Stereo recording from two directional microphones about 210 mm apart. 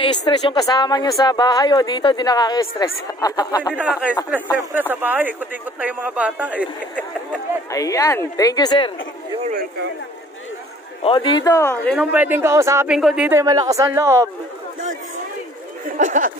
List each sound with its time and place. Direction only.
0.0 s a woman's voice: 20° left (ahead or behind)
3.7 s speech: 5° right (ahead or behind)
7.7 s a woman's voice: 15° left (ahead or behind)
11.0 s a woman's voice: 25° left (ahead or behind); by 12.0 s 10° left (ahead or behind)
12.0 s speech: 5° right (ahead or behind)
12.9 s speech: 5° right (ahead or behind)
16.0 s speech: 40° right (ahead or behind)